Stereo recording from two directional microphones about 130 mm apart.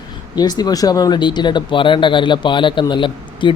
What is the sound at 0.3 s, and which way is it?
Speech, 30° left (ahead or behind).